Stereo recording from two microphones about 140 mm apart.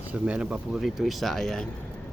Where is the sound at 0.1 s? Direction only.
10° right (ahead or behind).